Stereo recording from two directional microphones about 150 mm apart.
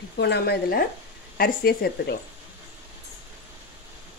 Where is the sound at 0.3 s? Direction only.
90° left.